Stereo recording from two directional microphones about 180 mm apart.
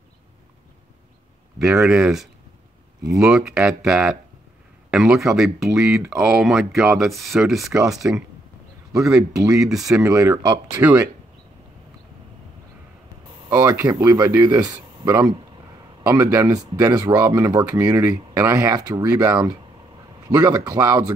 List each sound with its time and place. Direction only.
1.6 s speech: centre (ahead or behind)
9.5 s speech: centre (ahead or behind)
10.1 s speech: 15° right (ahead or behind)
10.8 s speech: 10° right (ahead or behind)
13.7 s speech: 10° right (ahead or behind)
14.0 s speech: 20° right (ahead or behind)
14.3 s speech: 10° right (ahead or behind)
17.7 s speech: 10° right (ahead or behind)